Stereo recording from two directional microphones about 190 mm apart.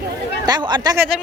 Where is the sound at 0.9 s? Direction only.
5° right (ahead or behind).